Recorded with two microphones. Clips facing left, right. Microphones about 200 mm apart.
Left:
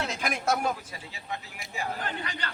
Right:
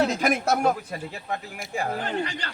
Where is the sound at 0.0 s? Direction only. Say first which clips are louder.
Right 8 dB; 40° right (ahead or behind).